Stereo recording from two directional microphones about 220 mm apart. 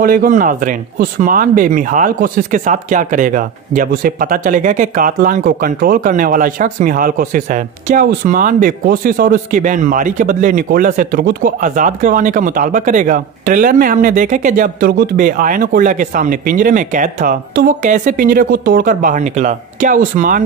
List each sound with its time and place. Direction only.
0.0 s speech: 40° right (ahead or behind)